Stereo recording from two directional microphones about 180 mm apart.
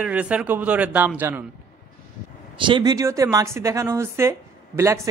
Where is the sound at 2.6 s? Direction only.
25° right (ahead or behind).